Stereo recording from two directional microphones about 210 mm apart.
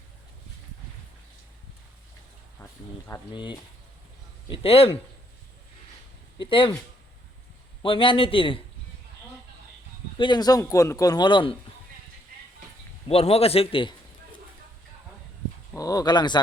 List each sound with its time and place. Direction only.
3.1 s a man's voice: 20° left (ahead or behind)
6.4 s a man's voice: 25° left (ahead or behind)
7.8 s a man's voice: 25° left (ahead or behind)
10.2 s a man's voice: 20° left (ahead or behind)
13.1 s a man's voice: 30° left (ahead or behind)
15.7 s speech: 15° left (ahead or behind)